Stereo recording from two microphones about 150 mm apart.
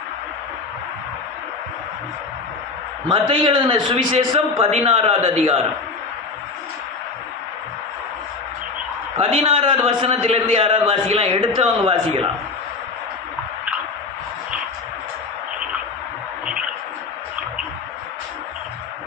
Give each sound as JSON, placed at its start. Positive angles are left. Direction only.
{"t": 3.1, "sound": "a man's voice", "side_deg": -35}
{"t": 9.1, "sound": "a man's voice", "side_deg": -40}